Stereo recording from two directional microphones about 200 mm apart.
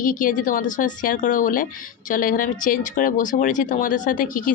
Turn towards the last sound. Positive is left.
turn(degrees=40)  # may be behind; listen again after turning